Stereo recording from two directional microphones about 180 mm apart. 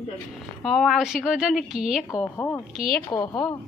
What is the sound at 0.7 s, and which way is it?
Speech, centre (ahead or behind).